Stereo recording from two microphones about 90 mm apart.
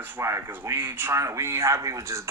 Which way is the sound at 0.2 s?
30° right (ahead or behind).